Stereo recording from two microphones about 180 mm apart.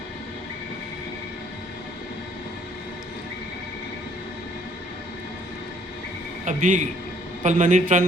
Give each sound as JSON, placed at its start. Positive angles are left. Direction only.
{"t": 6.4, "sound": "a man's voice", "side_deg": -45}